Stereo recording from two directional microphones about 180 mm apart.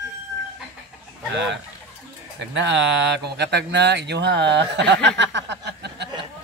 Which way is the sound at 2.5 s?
75° right (ahead or behind).